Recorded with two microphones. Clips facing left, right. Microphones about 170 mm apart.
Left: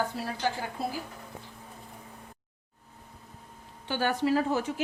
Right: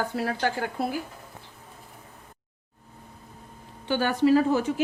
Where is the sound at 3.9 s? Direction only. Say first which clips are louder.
Right 6 dB; 90° right.